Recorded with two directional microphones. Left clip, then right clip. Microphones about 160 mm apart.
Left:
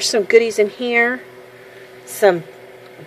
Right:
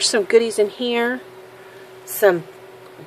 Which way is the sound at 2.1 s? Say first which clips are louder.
Left 2 dB; 5° left (ahead or behind).